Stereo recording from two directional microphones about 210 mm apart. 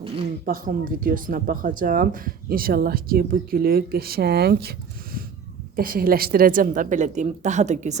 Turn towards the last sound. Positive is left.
turn(degrees=-35)  # may be behind; listen again after turning